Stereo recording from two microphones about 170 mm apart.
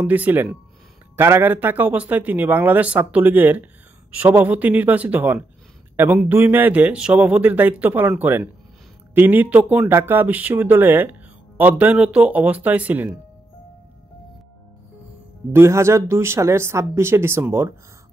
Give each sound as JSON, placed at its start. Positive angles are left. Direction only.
{"t": 0.0, "sound": "speech", "side_deg": -10}
{"t": 15.5, "sound": "speech", "side_deg": -15}